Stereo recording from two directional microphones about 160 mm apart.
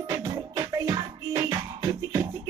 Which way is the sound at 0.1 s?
20° right (ahead or behind).